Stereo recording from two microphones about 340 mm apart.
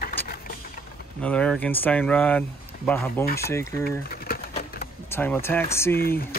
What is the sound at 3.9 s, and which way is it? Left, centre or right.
Pigeon, left.